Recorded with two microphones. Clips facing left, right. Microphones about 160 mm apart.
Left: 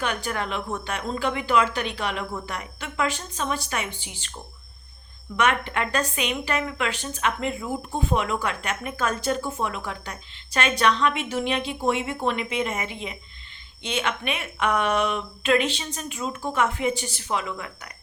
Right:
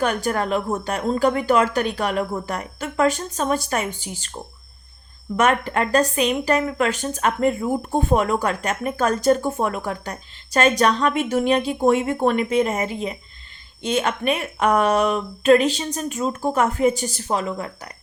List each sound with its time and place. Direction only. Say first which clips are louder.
0.0 s speech: right 6 dB; 45° right (ahead or behind)
5.4 s speech: right 4 dB; 40° right (ahead or behind)